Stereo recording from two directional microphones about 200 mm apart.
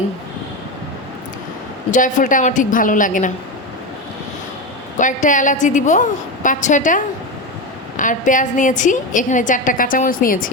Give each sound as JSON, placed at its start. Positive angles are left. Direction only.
{"t": 1.9, "sound": "a woman's voice", "side_deg": 40}
{"t": 4.9, "sound": "a woman's voice", "side_deg": 40}